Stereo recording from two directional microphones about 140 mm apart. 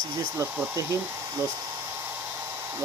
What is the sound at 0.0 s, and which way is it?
Speech, 25° right (ahead or behind).